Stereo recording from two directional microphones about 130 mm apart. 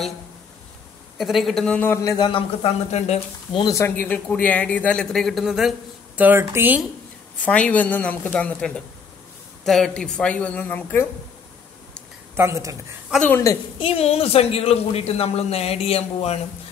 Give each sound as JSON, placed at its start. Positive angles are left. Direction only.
{"t": 1.1, "sound": "speech", "side_deg": 0}
{"t": 1.8, "sound": "a man's voice", "side_deg": 15}
{"t": 2.1, "sound": "speech", "side_deg": 40}
{"t": 3.6, "sound": "a man's voice", "side_deg": 20}
{"t": 7.4, "sound": "a man's voice", "side_deg": 10}
{"t": 12.4, "sound": "speech", "side_deg": -20}
{"t": 13.1, "sound": "speech", "side_deg": -5}
{"t": 13.7, "sound": "speech", "side_deg": 45}